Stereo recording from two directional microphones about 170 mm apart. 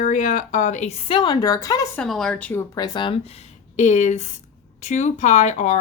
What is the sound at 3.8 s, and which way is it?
Speech, 45° left (ahead or behind).